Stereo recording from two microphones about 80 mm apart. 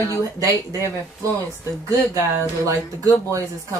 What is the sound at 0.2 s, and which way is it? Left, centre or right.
Speech, right.